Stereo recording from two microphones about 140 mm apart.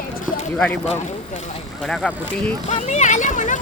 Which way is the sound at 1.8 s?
5° left (ahead or behind).